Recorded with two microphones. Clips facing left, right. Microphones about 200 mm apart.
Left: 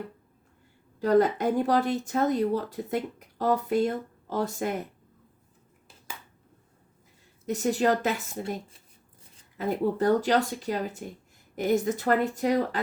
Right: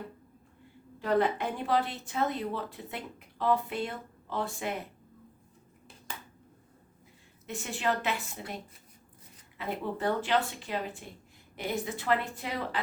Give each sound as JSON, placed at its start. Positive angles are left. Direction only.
{"t": 0.9, "sound": "speech", "side_deg": 40}
{"t": 7.4, "sound": "speech", "side_deg": 40}
{"t": 9.6, "sound": "a woman's voice", "side_deg": 40}